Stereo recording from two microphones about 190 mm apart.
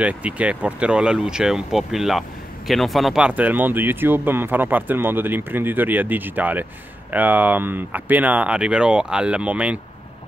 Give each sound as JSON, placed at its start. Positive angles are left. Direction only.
{"t": 0.0, "sound": "speech", "side_deg": -5}